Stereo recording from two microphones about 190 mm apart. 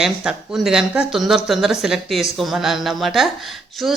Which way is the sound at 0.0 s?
Centre (ahead or behind).